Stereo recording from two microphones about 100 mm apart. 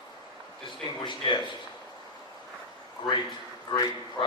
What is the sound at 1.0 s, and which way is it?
Speech, 50° left (ahead or behind).